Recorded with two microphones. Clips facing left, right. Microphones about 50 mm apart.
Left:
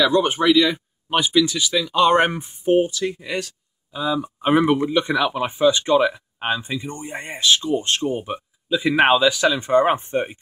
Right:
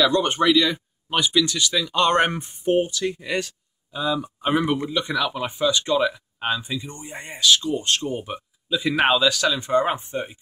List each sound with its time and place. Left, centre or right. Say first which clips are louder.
0.0 s speech: left 2 dB; centre
4.4 s speech: left 6 dB; left
8.2 s a sound: left 3 dB; centre
8.7 s speech: left 3 dB; left